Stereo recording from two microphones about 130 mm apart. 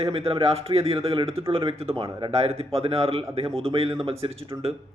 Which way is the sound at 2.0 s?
30° right (ahead or behind).